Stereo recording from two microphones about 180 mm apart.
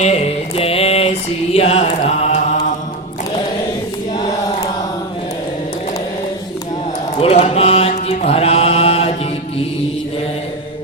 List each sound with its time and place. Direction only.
0.0 s mantra: 35° left (ahead or behind)
7.2 s mantra: 35° left (ahead or behind)